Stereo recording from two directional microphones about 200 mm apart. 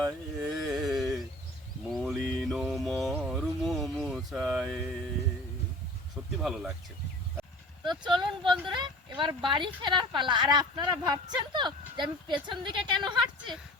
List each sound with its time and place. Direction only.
0.4 s a sound: centre (ahead or behind)
1.9 s mantra: centre (ahead or behind)
6.4 s speech: centre (ahead or behind)
7.9 s speech: 20° right (ahead or behind)